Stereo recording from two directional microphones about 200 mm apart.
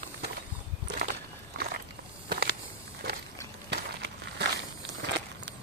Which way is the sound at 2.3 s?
55° right (ahead or behind).